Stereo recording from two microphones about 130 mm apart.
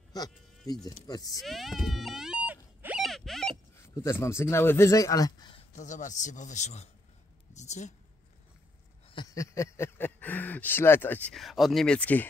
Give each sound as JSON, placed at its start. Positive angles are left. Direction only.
{"t": 0.1, "sound": "insect", "side_deg": 30}
{"t": 0.8, "sound": "speech", "side_deg": 30}
{"t": 1.4, "sound": "a sound", "side_deg": 0}
{"t": 3.0, "sound": "a sound", "side_deg": 0}
{"t": 3.8, "sound": "speech", "side_deg": 20}
{"t": 5.8, "sound": "a man's voice", "side_deg": 70}
{"t": 7.5, "sound": "a sound", "side_deg": 60}
{"t": 9.3, "sound": "speech", "side_deg": 25}
{"t": 11.3, "sound": "speech", "side_deg": 0}